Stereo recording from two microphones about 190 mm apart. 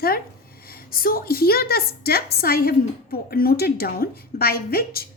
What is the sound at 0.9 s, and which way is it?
A woman's voice, 50° left (ahead or behind).